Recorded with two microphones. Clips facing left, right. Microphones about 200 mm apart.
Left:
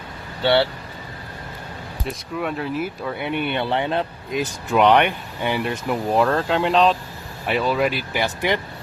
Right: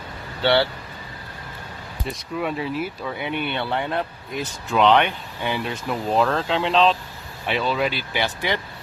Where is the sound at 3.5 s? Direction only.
20° left (ahead or behind).